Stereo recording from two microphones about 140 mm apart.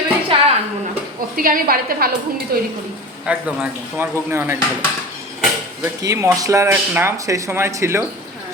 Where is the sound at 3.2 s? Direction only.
10° right (ahead or behind).